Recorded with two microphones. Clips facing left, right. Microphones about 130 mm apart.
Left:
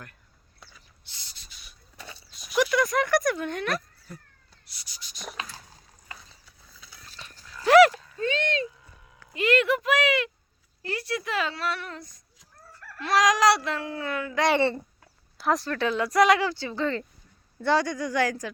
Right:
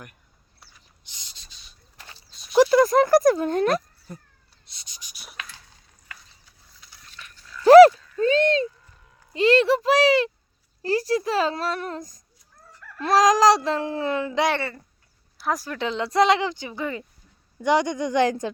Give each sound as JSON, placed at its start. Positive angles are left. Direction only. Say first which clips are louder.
{"t": 1.1, "sound": "a sound", "louder": "even", "side_deg": -20}
{"t": 2.5, "sound": "speech", "louder": "right 8 dB", "side_deg": -35}
{"t": 4.6, "sound": "a sound", "louder": "even", "side_deg": -25}
{"t": 6.1, "sound": "ratchet", "louder": "left 1 dB", "side_deg": 30}
{"t": 7.1, "sound": "dog", "louder": "right 3 dB", "side_deg": 35}
{"t": 7.6, "sound": "a sound", "louder": "right 7 dB", "side_deg": -35}
{"t": 9.3, "sound": "speech", "louder": "right 5 dB", "side_deg": -30}
{"t": 15.4, "sound": "speech", "louder": "left 1 dB", "side_deg": -5}
{"t": 15.7, "sound": "speech", "louder": "even", "side_deg": -20}